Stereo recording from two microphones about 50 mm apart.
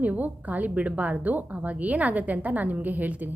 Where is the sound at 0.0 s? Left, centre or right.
Right.